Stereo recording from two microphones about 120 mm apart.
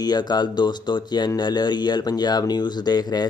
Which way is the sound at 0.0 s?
35° left (ahead or behind).